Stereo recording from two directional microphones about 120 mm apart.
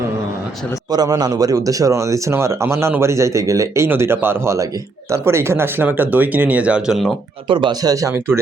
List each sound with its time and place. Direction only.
0.9 s speech: 35° right (ahead or behind); by 7.1 s 5° right (ahead or behind)
7.4 s speech: 45° right (ahead or behind); by 8.4 s 20° right (ahead or behind)